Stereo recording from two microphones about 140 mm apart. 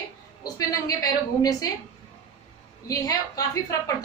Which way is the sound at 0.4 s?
25° left (ahead or behind).